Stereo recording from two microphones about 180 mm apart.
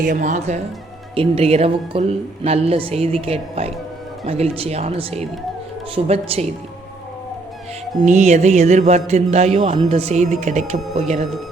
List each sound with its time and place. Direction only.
0.0 s speech: 45° right (ahead or behind)
8.0 s speech: 40° right (ahead or behind)